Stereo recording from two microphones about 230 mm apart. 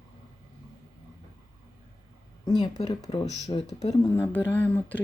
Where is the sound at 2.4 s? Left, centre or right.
Centre.